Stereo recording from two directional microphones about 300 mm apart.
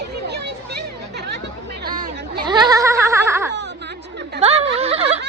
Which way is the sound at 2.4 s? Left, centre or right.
Centre.